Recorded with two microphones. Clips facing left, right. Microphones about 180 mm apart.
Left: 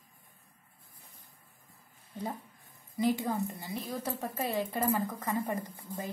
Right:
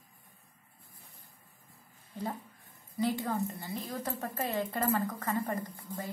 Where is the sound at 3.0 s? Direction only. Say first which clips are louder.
Left 2 dB; 15° left (ahead or behind).